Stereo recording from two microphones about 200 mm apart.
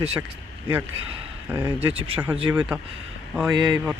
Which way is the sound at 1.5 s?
15° right (ahead or behind).